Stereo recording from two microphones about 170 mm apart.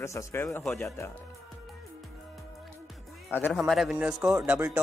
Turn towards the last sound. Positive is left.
turn(degrees=-10)  # may be behind; listen again after turning